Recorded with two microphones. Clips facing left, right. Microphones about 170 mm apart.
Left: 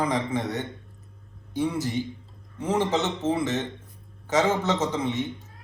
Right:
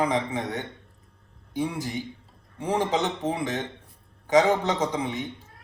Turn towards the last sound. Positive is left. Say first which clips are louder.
# left 1 dB
turn(degrees=-15)  # may be behind; listen again after turning